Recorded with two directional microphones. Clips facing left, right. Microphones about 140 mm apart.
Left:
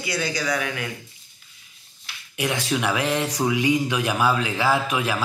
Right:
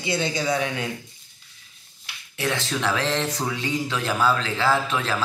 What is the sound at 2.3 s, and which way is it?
Speech, 15° left (ahead or behind).